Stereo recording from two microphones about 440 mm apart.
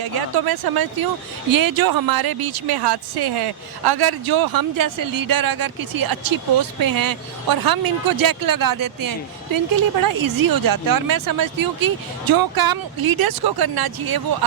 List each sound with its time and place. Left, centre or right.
0.0 s speech: right